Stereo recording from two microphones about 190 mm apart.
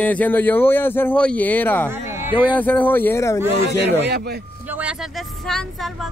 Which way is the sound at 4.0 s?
60° right (ahead or behind).